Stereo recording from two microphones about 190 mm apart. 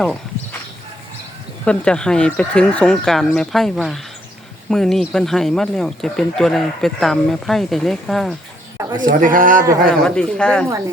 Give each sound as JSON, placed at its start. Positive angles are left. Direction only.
{"t": 1.6, "sound": "speech", "side_deg": 5}
{"t": 9.0, "sound": "a man's voice", "side_deg": -45}
{"t": 10.0, "sound": "speech", "side_deg": 5}